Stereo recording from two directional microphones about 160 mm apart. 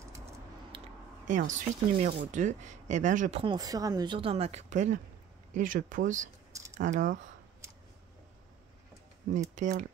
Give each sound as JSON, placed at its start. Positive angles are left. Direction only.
{"t": 1.2, "sound": "speech", "side_deg": -50}
{"t": 3.3, "sound": "speech", "side_deg": -30}
{"t": 9.6, "sound": "speech", "side_deg": -50}